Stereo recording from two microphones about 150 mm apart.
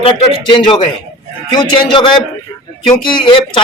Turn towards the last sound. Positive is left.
turn(degrees=35)  # may be behind; listen again after turning